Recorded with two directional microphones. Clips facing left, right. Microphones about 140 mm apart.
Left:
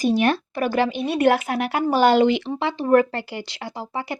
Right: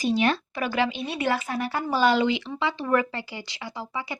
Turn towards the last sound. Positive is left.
turn(degrees=55)  # may be behind; listen again after turning